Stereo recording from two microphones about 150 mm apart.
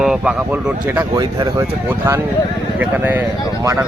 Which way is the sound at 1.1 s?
25° right (ahead or behind).